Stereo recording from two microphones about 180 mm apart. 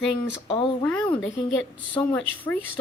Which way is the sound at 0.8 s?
10° left (ahead or behind).